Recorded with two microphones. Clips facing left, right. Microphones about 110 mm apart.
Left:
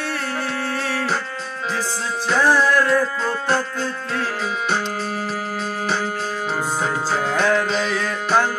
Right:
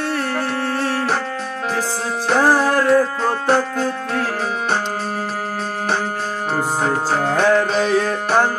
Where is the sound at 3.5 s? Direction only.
60° right (ahead or behind).